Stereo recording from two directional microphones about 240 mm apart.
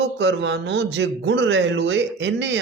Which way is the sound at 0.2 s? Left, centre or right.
Right.